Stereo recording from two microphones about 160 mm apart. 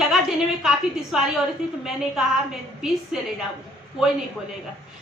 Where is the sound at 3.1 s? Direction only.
5° right (ahead or behind).